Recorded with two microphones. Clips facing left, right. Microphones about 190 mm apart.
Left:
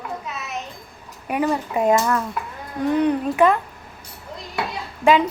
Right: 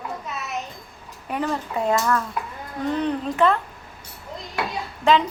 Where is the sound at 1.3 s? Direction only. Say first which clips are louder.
Left 4 dB; 10° left (ahead or behind).